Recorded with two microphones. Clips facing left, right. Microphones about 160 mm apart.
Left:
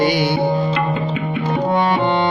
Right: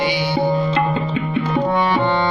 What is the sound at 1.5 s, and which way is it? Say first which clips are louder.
Music: left 1 dB; 20° left (ahead or behind).